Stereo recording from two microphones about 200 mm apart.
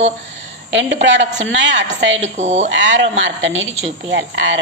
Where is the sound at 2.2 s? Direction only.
35° right (ahead or behind).